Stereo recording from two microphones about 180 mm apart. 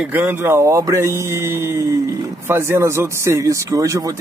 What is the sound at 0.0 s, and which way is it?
Speech, 10° right (ahead or behind).